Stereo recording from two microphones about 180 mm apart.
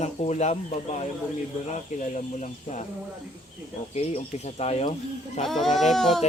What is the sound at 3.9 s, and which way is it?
Speech, 35° left (ahead or behind).